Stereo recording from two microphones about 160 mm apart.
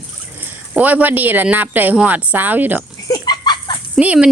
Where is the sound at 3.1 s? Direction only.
25° left (ahead or behind).